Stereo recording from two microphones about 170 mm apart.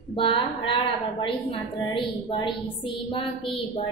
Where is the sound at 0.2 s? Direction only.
30° left (ahead or behind).